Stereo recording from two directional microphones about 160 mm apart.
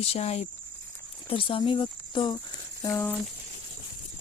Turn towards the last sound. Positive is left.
turn(degrees=15)  # may be behind; listen again after turning